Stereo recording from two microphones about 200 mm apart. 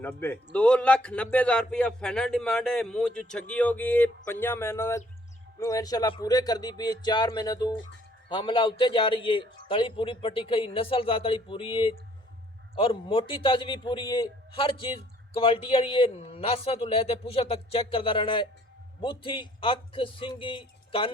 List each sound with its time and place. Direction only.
0.0 s a man's voice: 10° left (ahead or behind); by 21.1 s 25° left (ahead or behind)